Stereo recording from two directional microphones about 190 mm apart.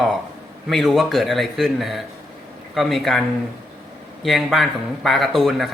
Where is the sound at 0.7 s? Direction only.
Centre (ahead or behind).